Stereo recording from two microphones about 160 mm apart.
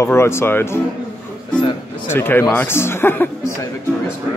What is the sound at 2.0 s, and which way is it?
Speech, 15° left (ahead or behind).